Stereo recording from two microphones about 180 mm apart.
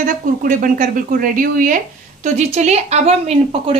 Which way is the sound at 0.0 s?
50° right (ahead or behind).